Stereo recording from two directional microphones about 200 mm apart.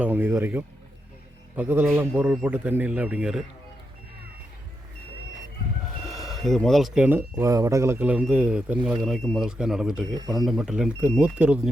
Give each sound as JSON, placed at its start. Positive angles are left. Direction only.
{"t": 0.0, "sound": "a man's voice", "side_deg": -10}
{"t": 6.1, "sound": "speech", "side_deg": 0}